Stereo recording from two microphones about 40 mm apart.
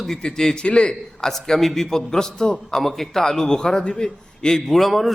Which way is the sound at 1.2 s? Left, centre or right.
Centre.